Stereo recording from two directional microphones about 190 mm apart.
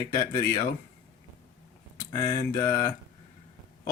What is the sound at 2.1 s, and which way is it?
Speech, 20° left (ahead or behind).